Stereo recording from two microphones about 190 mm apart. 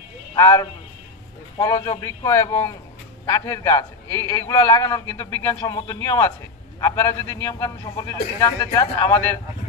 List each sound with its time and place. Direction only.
0.4 s a man's voice: 15° left (ahead or behind)